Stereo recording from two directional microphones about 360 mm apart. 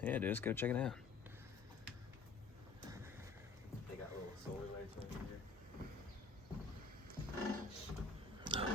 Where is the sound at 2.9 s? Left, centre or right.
Centre.